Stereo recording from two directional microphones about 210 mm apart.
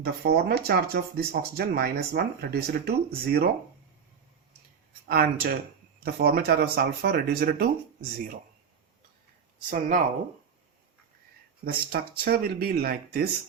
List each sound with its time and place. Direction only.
0.0 s speech: 50° right (ahead or behind)
5.0 s speech: 45° right (ahead or behind)
9.6 s speech: 40° right (ahead or behind)
11.6 s speech: 45° right (ahead or behind)